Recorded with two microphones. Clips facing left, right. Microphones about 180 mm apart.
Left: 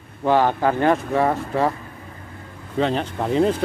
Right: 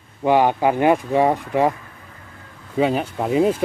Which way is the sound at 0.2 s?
15° right (ahead or behind).